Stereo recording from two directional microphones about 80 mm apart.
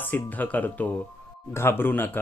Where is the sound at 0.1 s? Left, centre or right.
Left.